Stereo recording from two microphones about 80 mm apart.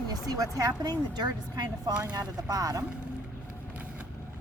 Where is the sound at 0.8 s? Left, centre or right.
Right.